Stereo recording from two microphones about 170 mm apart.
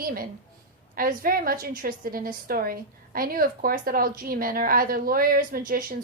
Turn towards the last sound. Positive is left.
turn(degrees=-55)  # may be behind; listen again after turning